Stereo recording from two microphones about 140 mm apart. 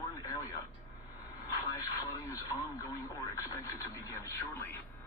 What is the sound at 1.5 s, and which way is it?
Radio, 25° left (ahead or behind).